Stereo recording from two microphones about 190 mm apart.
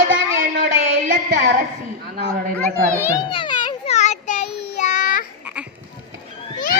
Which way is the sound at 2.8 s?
15° right (ahead or behind).